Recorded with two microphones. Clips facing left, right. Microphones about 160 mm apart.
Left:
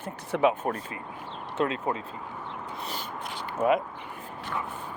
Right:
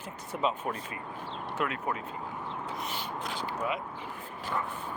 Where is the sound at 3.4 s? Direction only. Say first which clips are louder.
Left 10 dB; 50° left (ahead or behind).